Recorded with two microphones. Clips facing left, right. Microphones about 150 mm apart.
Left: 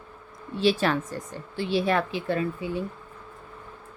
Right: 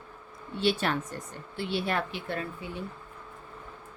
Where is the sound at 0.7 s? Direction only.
90° left.